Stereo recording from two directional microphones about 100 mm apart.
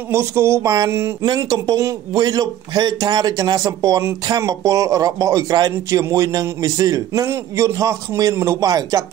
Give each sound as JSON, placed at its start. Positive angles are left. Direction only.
{"t": 0.1, "sound": "a man's voice", "side_deg": -25}